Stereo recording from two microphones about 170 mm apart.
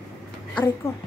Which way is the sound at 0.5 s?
15° left (ahead or behind).